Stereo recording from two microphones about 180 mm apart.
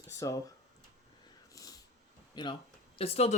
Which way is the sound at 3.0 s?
35° left (ahead or behind).